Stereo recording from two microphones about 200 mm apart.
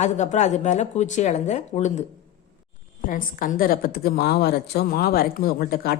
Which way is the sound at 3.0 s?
45° left (ahead or behind).